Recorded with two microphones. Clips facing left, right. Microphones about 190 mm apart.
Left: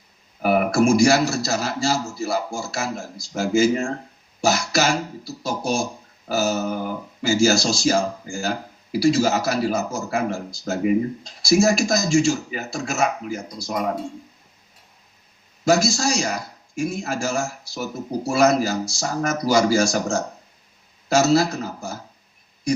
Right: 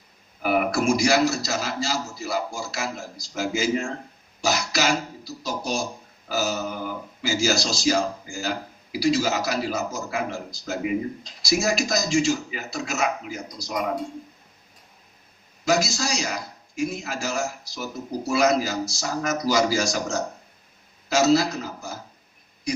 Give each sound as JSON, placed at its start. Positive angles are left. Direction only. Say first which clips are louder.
{"t": 0.4, "sound": "speech", "louder": "left 4 dB", "side_deg": 45}
{"t": 15.6, "sound": "speech", "louder": "left 4 dB", "side_deg": 50}